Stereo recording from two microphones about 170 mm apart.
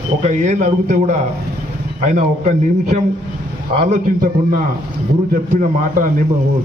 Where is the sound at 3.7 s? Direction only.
35° right (ahead or behind).